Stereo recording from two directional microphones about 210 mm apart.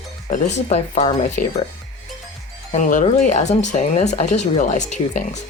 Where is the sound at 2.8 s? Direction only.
40° left (ahead or behind).